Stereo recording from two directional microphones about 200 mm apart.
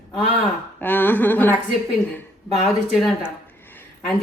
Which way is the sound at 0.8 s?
10° left (ahead or behind).